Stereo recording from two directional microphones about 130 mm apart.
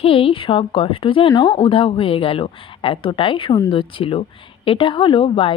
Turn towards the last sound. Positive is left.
turn(degrees=45)  # may be behind; listen again after turning